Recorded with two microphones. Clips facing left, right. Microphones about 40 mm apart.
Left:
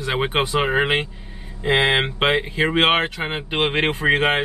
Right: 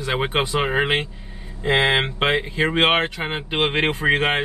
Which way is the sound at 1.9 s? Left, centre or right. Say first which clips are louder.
Left 1 dB; centre.